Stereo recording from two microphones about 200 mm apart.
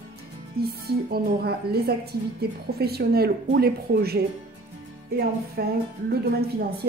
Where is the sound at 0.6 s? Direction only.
50° right (ahead or behind).